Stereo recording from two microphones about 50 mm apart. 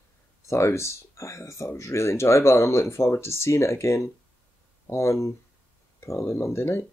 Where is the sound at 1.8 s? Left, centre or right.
Left.